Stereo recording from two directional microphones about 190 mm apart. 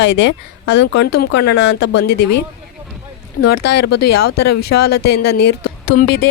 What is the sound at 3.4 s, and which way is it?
Speech, 50° left (ahead or behind).